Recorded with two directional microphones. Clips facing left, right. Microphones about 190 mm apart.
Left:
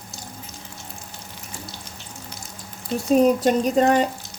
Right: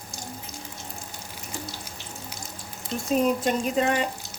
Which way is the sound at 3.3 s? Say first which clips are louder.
Left 6 dB; 40° left (ahead or behind).